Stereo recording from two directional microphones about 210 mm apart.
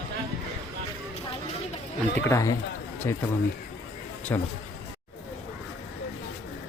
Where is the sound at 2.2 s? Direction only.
15° left (ahead or behind).